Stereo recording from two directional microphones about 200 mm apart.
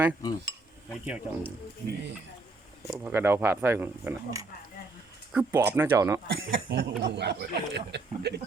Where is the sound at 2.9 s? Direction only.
10° right (ahead or behind).